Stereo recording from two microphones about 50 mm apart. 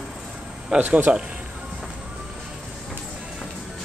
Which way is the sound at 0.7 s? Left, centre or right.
Right.